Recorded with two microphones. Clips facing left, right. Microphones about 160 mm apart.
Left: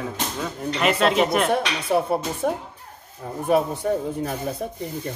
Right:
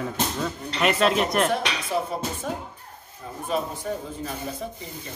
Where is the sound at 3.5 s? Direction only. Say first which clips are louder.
Left 7 dB; 60° left (ahead or behind).